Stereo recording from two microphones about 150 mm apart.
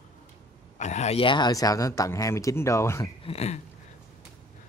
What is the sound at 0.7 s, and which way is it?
Speech, 50° left (ahead or behind).